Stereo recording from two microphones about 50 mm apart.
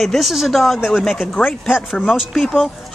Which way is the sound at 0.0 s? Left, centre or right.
Centre.